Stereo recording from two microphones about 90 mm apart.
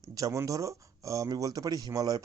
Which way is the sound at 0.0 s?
40° right (ahead or behind).